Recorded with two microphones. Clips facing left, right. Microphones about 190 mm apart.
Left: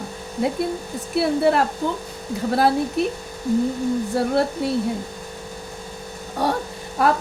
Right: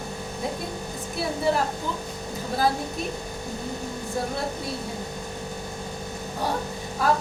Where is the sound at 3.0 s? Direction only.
70° left (ahead or behind).